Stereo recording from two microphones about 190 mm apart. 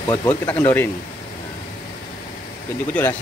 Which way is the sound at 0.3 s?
5° left (ahead or behind).